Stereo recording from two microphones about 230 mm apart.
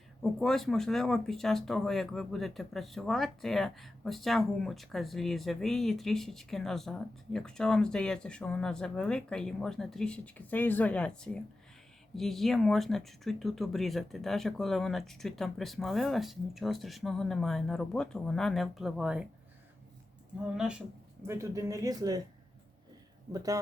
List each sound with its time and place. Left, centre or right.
0.2 s speech: centre
21.2 s speech: centre
23.3 s speech: centre